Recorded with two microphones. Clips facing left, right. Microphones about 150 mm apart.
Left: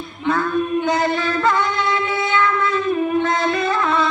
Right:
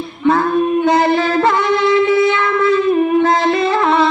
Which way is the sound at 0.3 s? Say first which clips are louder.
Right 6 dB; 35° right (ahead or behind).